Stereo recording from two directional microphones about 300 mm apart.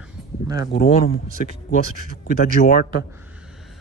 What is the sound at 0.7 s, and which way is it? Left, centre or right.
Speech, left.